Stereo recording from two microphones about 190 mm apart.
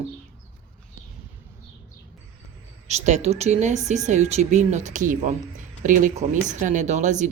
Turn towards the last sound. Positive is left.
turn(degrees=-40)  # may be behind; listen again after turning